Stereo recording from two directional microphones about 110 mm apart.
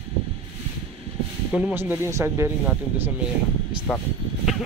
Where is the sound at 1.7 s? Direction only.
20° right (ahead or behind).